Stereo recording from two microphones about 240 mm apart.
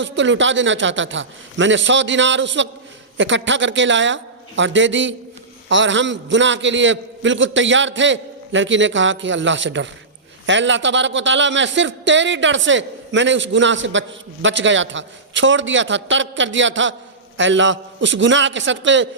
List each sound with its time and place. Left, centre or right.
0.0 s a man's voice: right